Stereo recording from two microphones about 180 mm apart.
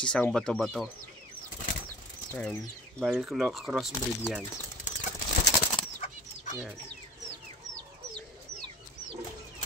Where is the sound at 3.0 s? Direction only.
5° right (ahead or behind).